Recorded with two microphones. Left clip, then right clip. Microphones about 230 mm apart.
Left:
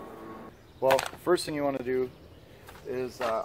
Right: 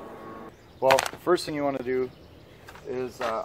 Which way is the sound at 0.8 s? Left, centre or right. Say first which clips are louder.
Right 3 dB; right.